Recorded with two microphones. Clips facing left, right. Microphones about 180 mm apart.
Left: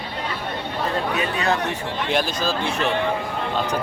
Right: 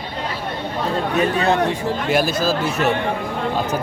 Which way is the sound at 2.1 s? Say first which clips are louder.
Right 4 dB; 5° right (ahead or behind).